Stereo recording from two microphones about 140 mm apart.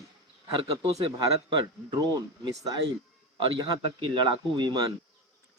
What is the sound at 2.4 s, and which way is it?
Speech, 25° right (ahead or behind).